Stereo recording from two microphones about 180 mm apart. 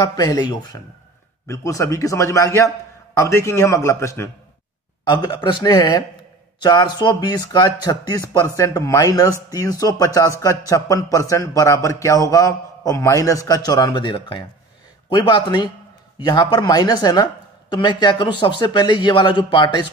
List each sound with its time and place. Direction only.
0.0 s a man's voice: 20° left (ahead or behind)